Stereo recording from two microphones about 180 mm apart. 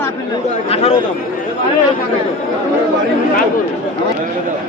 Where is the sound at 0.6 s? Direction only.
35° left (ahead or behind).